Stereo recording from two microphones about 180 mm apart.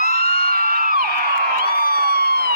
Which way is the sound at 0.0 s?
55° right (ahead or behind).